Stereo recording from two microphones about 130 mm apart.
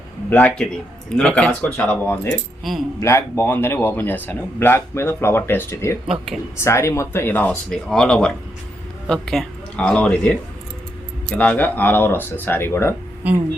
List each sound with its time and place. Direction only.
0.3 s speech: 15° left (ahead or behind)
6.1 s speech: centre (ahead or behind)
6.6 s speech: 20° left (ahead or behind)